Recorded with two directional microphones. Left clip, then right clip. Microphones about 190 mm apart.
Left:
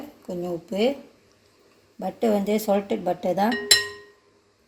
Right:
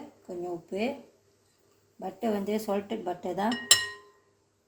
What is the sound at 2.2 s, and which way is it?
Speech, 45° left (ahead or behind).